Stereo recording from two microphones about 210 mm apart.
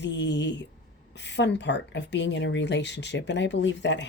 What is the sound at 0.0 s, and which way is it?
Speech, 55° left (ahead or behind).